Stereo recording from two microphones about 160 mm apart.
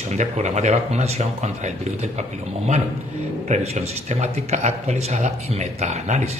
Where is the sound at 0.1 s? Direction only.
45° right (ahead or behind).